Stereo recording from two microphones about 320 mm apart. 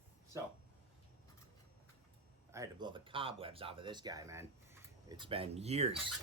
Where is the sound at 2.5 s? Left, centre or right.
Centre.